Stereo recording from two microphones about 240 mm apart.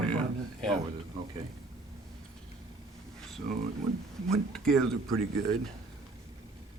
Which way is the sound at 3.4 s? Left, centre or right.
Right.